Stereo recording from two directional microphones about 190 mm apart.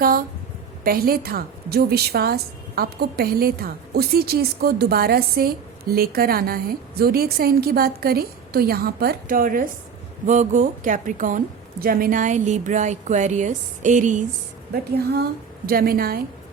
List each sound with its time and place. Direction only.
0.9 s a woman's voice: 50° right (ahead or behind)
15.6 s a woman's voice: 50° right (ahead or behind)